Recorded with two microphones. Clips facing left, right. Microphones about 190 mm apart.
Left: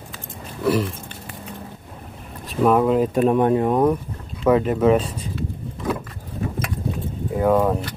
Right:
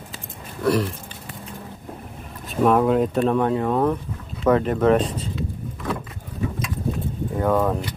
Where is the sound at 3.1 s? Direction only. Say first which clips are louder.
Left 3 dB; 15° left (ahead or behind).